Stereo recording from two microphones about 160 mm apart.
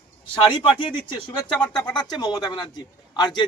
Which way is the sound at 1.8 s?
25° left (ahead or behind).